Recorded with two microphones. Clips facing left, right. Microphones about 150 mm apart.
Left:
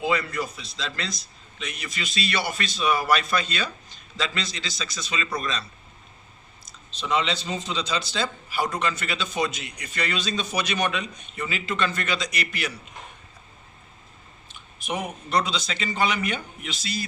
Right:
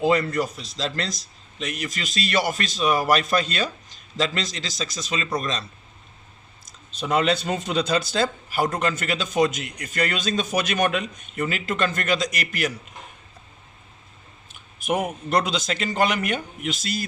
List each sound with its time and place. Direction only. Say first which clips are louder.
0.0 s speech: right 5 dB; 40° right (ahead or behind)
6.7 s speech: right 2 dB; 50° right (ahead or behind)
14.5 s speech: right 6 dB; 50° right (ahead or behind)